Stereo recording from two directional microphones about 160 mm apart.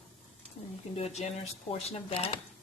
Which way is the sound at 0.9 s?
40° left (ahead or behind).